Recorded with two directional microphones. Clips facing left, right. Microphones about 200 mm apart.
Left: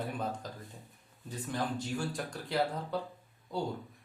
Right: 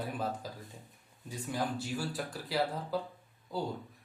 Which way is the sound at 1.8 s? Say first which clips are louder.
Left 1 dB; 5° right (ahead or behind).